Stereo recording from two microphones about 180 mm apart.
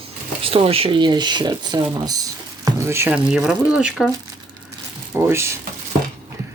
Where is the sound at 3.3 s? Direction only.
5° right (ahead or behind).